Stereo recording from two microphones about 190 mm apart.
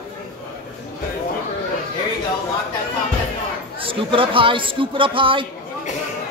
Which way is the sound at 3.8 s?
30° right (ahead or behind).